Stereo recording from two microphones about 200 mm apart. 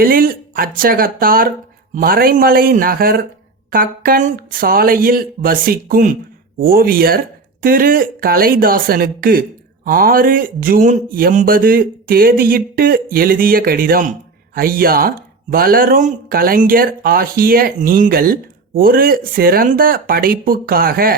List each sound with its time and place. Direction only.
0.0 s speech: 45° right (ahead or behind)